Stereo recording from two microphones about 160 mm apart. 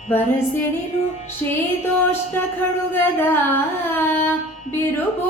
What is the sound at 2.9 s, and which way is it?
Carnatic music, 15° left (ahead or behind).